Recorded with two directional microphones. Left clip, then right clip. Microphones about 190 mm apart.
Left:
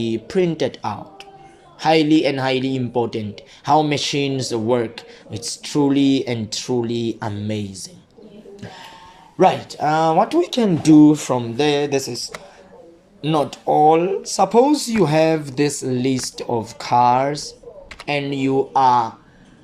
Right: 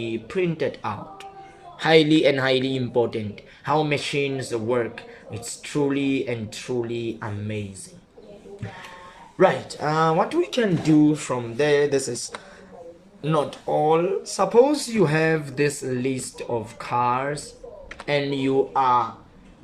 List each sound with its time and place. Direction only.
0.0 s speech: 25° left (ahead or behind)
0.7 s speech: 10° left (ahead or behind)
9.4 s speech: 15° left (ahead or behind)
13.2 s speech: 20° left (ahead or behind)
18.0 s speech: 10° left (ahead or behind)